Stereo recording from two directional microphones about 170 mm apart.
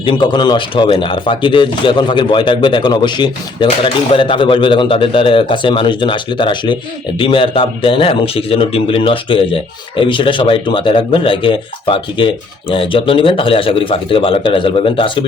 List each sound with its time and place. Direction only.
0.0 s speech: 30° left (ahead or behind)